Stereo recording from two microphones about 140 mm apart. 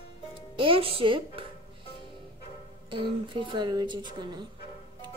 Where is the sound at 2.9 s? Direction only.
35° right (ahead or behind).